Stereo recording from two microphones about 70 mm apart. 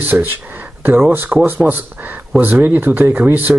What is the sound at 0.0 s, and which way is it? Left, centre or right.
Speech, right.